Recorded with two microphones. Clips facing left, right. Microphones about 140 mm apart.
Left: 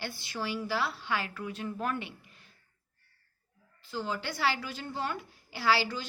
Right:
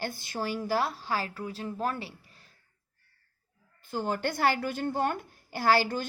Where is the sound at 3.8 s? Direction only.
50° right (ahead or behind).